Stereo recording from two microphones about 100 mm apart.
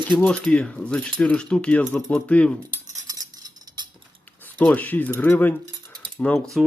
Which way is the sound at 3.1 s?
40° right (ahead or behind).